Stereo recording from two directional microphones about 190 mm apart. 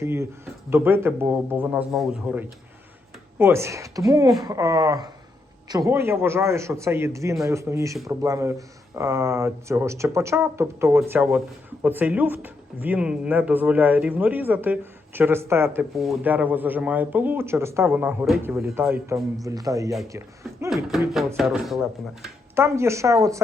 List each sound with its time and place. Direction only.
0.0 s speech: 15° right (ahead or behind)
20.7 s speech: centre (ahead or behind)
22.5 s speech: 15° right (ahead or behind)